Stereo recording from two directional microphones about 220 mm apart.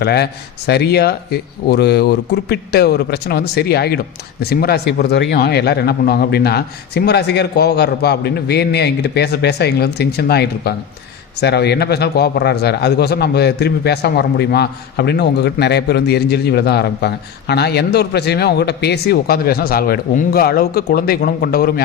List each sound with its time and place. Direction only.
0.0 s speech: 50° left (ahead or behind)